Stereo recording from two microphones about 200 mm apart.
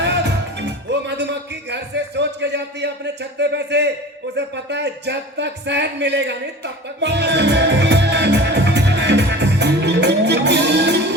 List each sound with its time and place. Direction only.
0.6 s music: 60° right (ahead or behind)
3.3 s speech: 60° right (ahead or behind)
7.0 s music: 60° right (ahead or behind)